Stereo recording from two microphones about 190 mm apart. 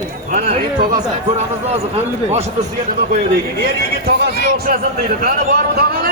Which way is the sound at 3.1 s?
50° right (ahead or behind).